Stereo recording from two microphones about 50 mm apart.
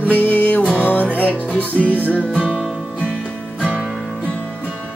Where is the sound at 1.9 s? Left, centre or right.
Right.